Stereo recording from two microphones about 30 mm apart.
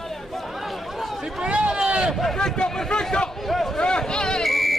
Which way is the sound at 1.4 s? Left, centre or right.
Right.